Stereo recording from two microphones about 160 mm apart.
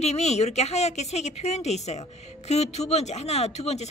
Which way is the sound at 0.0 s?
45° left (ahead or behind).